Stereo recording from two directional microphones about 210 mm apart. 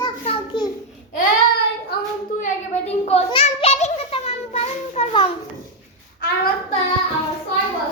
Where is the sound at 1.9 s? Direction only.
50° left (ahead or behind).